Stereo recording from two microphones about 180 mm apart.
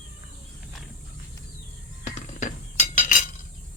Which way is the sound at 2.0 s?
40° left (ahead or behind).